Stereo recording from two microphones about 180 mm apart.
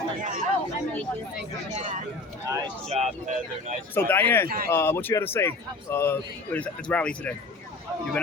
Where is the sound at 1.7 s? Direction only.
40° right (ahead or behind).